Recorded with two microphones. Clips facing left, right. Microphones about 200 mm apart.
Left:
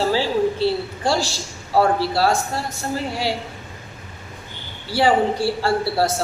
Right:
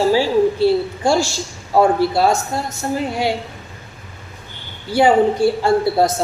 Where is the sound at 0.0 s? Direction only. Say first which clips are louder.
Right 5 dB; 15° right (ahead or behind).